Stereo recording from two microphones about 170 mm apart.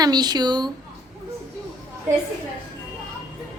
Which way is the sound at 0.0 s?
25° right (ahead or behind).